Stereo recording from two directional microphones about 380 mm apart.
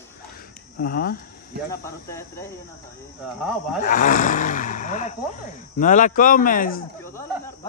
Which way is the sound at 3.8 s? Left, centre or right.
Left.